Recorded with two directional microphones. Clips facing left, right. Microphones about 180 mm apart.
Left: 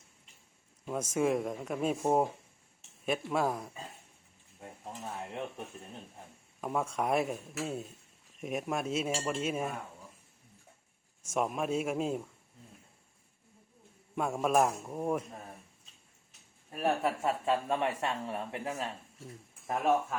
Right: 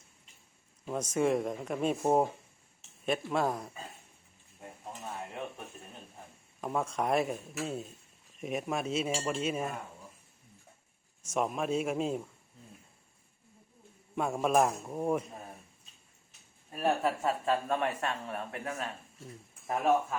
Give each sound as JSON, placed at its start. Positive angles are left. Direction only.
{"t": 0.9, "sound": "speech", "side_deg": 5}
{"t": 4.9, "sound": "speech", "side_deg": 0}
{"t": 6.6, "sound": "speech", "side_deg": 5}
{"t": 11.3, "sound": "speech", "side_deg": 5}
{"t": 14.2, "sound": "speech", "side_deg": 0}
{"t": 16.8, "sound": "speech", "side_deg": 5}
{"t": 17.4, "sound": "speech", "side_deg": 20}
{"t": 19.6, "sound": "speech", "side_deg": -5}